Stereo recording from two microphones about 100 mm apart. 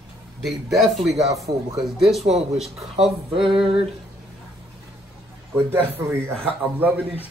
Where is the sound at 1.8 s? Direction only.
5° right (ahead or behind).